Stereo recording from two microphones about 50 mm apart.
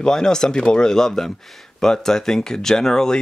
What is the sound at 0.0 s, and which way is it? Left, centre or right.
Speech, centre.